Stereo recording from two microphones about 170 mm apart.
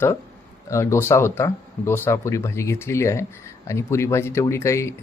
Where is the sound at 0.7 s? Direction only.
15° left (ahead or behind).